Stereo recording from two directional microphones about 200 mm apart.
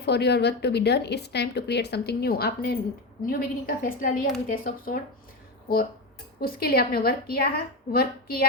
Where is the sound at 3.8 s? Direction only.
45° left (ahead or behind).